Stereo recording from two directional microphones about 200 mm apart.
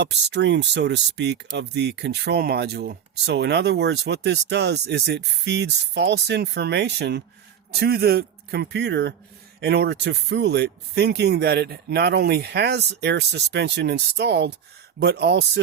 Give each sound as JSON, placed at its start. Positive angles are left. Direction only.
{"t": 0.0, "sound": "a man's voice", "side_deg": -60}